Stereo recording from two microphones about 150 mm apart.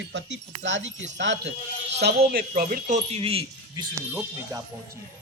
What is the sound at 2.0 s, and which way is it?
Speech, 85° right.